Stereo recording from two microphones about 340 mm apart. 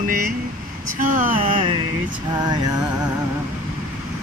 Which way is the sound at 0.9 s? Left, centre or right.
Right.